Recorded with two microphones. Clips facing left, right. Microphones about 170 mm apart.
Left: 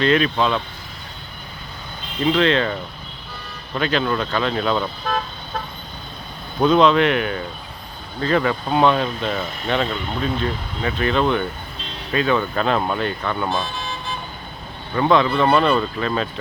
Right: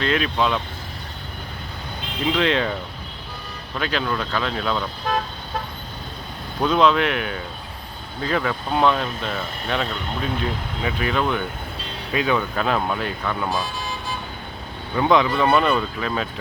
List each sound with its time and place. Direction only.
0.0 s speech: 5° right (ahead or behind)
2.3 s speech: 10° right (ahead or behind)
3.8 s speech: 5° right (ahead or behind)
6.6 s speech: 5° right (ahead or behind)
14.9 s speech: 10° right (ahead or behind)